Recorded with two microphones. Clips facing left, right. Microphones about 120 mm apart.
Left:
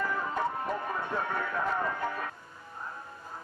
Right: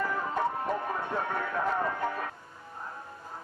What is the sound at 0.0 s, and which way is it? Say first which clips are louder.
Music: right 1 dB; 35° right (ahead or behind).